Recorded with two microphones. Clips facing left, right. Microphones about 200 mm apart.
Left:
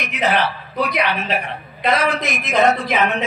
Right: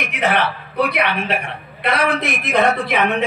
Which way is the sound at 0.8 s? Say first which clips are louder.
Right 1 dB; 50° right (ahead or behind).